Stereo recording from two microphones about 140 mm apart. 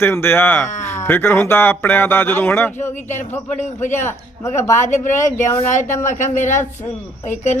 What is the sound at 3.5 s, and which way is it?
A woman's voice, 60° left (ahead or behind).